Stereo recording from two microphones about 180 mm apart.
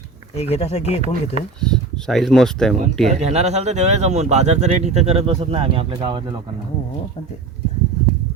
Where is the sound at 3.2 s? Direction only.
35° right (ahead or behind).